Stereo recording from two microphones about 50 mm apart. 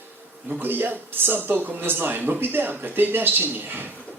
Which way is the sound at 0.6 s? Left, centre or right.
Right.